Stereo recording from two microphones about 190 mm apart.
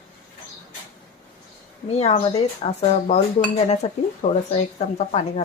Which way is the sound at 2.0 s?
30° left (ahead or behind).